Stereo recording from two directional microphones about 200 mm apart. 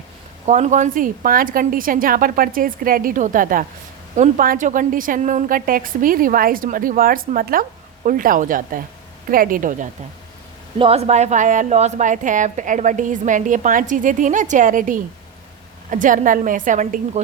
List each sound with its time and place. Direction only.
0.4 s a woman's voice: 35° right (ahead or behind)
10.8 s a woman's voice: 30° right (ahead or behind)